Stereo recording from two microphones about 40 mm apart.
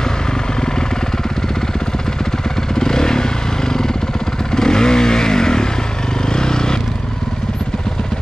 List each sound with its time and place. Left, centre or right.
2.7 s motorcycle: centre
4.6 s vehicle: centre